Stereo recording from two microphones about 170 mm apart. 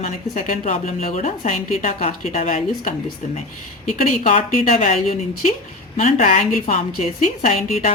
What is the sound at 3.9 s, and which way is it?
A woman's voice, 50° left (ahead or behind).